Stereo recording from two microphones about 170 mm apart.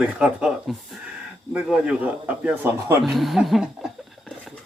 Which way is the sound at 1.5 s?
5° right (ahead or behind).